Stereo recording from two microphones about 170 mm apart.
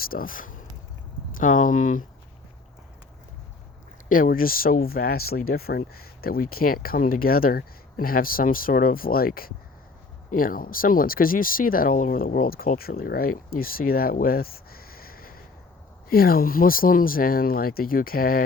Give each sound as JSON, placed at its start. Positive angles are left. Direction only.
{"t": 0.0, "sound": "speech", "side_deg": 55}
{"t": 4.1, "sound": "speech", "side_deg": 55}